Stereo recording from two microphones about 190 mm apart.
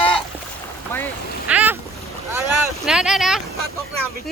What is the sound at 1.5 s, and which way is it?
Boat, 5° right (ahead or behind).